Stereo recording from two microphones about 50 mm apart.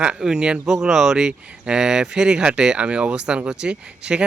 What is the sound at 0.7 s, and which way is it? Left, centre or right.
Speech, centre.